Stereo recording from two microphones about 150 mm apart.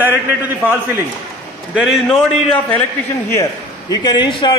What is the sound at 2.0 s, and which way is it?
A man's voice, 5° left (ahead or behind).